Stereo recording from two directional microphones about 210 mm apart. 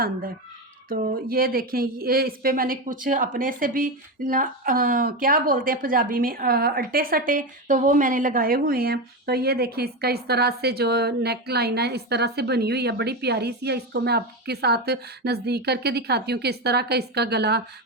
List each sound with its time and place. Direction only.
0.9 s speech: 45° right (ahead or behind)